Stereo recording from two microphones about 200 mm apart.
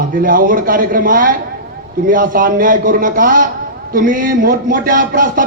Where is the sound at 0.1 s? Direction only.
45° right (ahead or behind).